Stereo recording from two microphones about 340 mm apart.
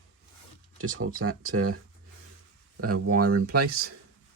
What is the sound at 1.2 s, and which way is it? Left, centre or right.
Speech, right.